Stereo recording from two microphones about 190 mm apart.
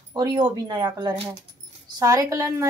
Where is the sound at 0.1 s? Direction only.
20° right (ahead or behind).